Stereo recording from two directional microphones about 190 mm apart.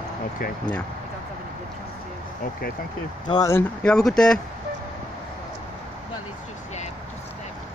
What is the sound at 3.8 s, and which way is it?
Speech, 5° left (ahead or behind).